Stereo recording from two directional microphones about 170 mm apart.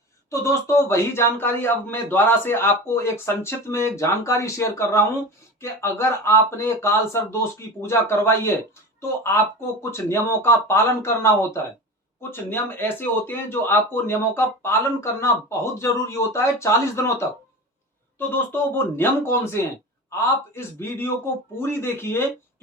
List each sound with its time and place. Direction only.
0.3 s speech: 15° left (ahead or behind)